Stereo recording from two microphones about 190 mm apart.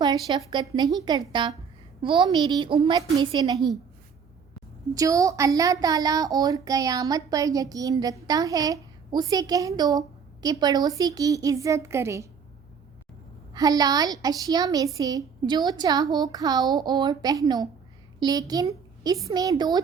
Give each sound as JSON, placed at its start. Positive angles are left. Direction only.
{"t": 0.0, "sound": "a woman's voice", "side_deg": -20}
{"t": 4.9, "sound": "a woman's voice", "side_deg": -15}
{"t": 13.5, "sound": "a woman's voice", "side_deg": -20}